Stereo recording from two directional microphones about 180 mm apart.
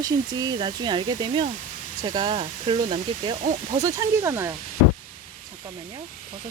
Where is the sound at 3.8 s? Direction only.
15° right (ahead or behind).